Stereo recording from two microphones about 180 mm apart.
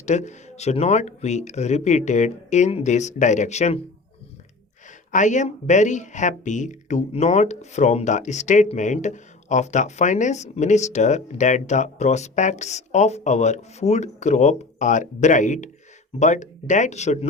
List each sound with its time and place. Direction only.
0.0 s speech: 40° left (ahead or behind)
5.1 s speech: 45° left (ahead or behind)